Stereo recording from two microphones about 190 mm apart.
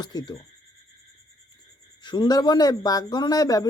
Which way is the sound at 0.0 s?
20° left (ahead or behind).